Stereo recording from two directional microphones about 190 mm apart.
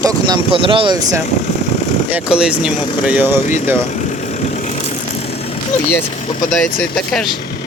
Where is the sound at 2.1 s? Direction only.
5° right (ahead or behind).